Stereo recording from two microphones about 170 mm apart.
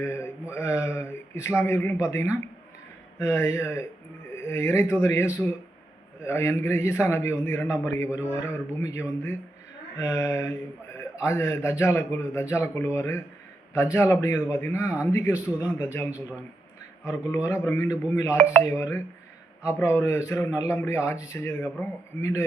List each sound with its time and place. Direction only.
0.0 s mantra: 15° left (ahead or behind)
0.5 s a man's voice: 15° left (ahead or behind)
17.1 s a man's voice: 15° left (ahead or behind)